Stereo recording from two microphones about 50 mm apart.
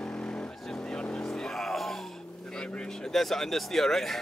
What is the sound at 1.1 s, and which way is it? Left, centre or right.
Music, centre.